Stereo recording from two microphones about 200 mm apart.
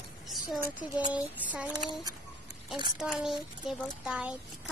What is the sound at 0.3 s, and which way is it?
Speech, 5° right (ahead or behind).